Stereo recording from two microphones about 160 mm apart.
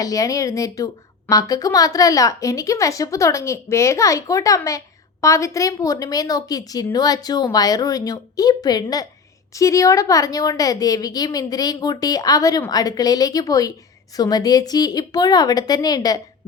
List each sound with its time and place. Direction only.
0.0 s a woman's voice: 20° left (ahead or behind)